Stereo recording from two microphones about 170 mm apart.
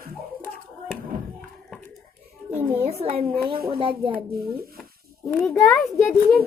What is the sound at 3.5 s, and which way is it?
Speech, 60° right (ahead or behind).